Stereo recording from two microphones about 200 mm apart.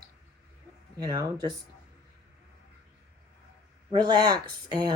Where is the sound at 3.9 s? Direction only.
20° right (ahead or behind).